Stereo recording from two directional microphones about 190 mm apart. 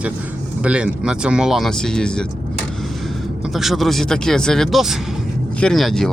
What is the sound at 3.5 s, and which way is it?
Speech, centre (ahead or behind).